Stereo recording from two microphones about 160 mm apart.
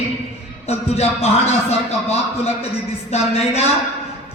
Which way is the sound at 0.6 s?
40° left (ahead or behind).